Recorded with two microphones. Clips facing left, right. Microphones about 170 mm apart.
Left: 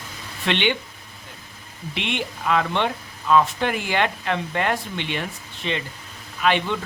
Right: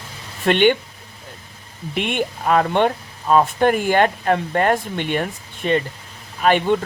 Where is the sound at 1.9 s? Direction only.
50° right (ahead or behind).